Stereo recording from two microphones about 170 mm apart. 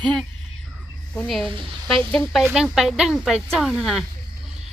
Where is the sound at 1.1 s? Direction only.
Centre (ahead or behind).